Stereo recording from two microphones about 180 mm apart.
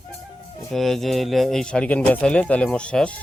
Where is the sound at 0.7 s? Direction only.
Centre (ahead or behind).